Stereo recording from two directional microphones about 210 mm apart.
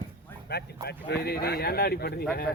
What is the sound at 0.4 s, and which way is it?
Speech, 50° left (ahead or behind).